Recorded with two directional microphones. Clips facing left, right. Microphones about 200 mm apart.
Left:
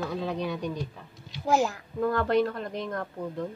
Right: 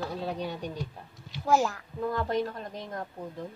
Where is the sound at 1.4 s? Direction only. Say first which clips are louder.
Left 1 dB; 20° left (ahead or behind).